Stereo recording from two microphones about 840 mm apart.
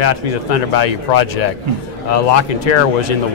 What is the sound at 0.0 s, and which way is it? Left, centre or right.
A man's voice, left.